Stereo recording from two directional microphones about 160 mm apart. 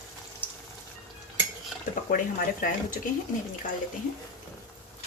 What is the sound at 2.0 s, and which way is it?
Speech, 60° left (ahead or behind).